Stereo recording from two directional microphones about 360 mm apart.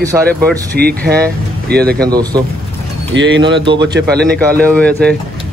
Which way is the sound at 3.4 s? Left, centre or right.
Centre.